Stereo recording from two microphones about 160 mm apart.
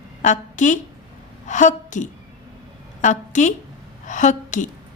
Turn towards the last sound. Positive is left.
turn(degrees=50)  # may be behind; listen again after turning